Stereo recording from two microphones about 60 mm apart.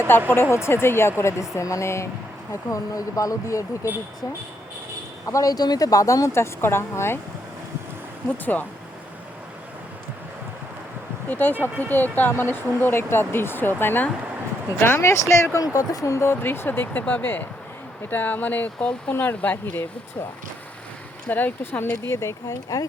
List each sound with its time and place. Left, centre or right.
0.3 s speech: left
2.5 s speech: left
5.2 s a woman's voice: left
8.5 s speech: left
11.3 s speech: left
15.0 s speech: left
15.5 s speech: left
19.1 s speech: left
21.2 s speech: left
22.0 s speech: left